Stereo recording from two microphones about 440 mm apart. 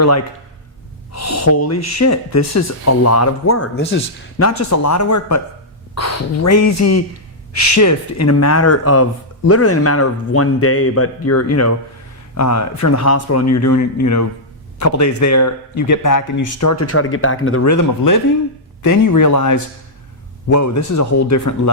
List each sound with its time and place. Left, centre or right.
1.1 s speech: left